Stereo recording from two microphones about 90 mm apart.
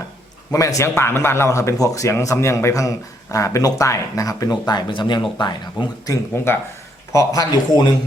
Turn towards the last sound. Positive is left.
turn(degrees=50)  # may be behind; listen again after turning